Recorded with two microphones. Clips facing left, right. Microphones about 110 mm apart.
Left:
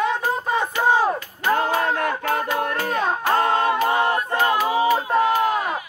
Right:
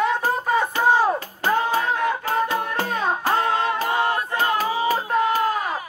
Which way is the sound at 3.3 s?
45° left (ahead or behind).